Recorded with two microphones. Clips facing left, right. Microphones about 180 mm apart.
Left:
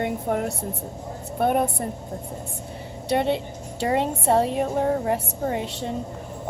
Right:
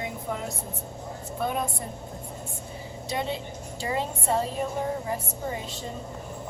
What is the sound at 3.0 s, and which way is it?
A woman's voice, 65° left (ahead or behind).